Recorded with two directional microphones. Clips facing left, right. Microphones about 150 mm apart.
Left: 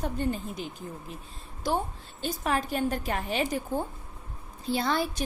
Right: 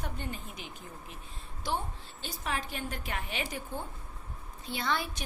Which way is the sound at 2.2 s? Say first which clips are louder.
Left 8 dB; 45° left (ahead or behind).